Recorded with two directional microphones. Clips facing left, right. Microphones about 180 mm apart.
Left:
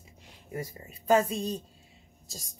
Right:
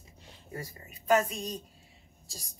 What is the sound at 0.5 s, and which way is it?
Speech, 25° left (ahead or behind).